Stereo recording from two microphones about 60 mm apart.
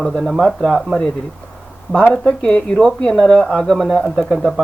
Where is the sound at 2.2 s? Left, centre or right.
Centre.